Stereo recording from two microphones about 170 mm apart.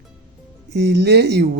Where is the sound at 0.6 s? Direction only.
85° right.